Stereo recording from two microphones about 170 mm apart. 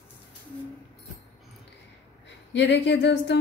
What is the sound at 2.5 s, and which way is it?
Speech, 90° left.